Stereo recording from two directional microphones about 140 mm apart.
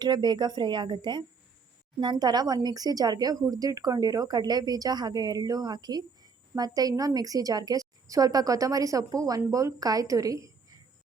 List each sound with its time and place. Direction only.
0.0 s speech: 30° right (ahead or behind)